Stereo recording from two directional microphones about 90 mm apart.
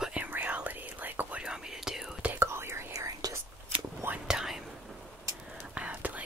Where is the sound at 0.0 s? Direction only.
15° right (ahead or behind).